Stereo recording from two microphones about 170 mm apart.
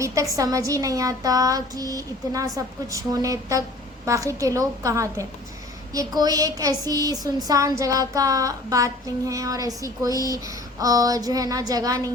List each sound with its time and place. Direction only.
0.0 s speech: 20° right (ahead or behind)